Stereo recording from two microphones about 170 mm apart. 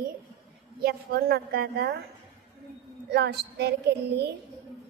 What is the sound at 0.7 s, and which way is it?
A woman's voice, 65° right (ahead or behind).